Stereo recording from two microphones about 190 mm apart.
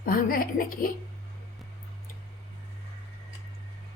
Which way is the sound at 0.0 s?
50° left (ahead or behind).